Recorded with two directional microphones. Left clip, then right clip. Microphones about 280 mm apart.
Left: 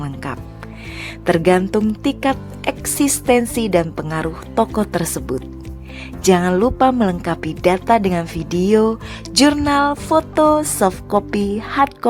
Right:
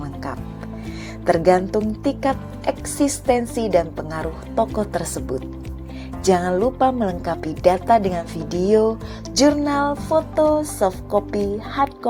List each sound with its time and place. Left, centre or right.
0.0 s music: left
1.2 s speech: left
6.2 s speech: left
6.7 s a woman's voice: left
7.0 s speech: left